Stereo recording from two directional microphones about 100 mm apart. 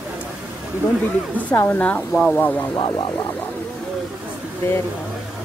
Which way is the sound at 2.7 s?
50° left (ahead or behind).